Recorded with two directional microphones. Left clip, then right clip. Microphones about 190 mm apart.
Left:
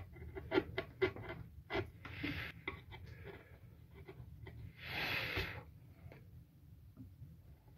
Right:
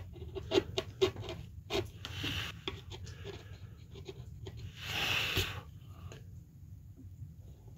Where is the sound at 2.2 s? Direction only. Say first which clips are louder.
Right 5 dB; 35° right (ahead or behind).